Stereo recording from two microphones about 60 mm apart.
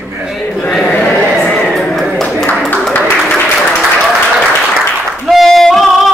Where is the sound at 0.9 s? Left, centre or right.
Left.